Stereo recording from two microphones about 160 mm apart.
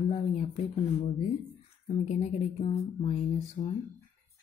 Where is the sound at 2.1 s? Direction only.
45° left (ahead or behind).